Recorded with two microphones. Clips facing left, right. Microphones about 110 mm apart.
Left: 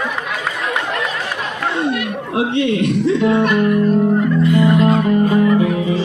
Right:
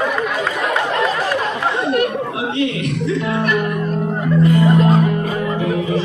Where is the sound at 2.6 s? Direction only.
30° left (ahead or behind).